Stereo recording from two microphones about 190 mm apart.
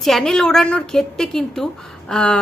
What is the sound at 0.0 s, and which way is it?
A woman's voice, centre (ahead or behind).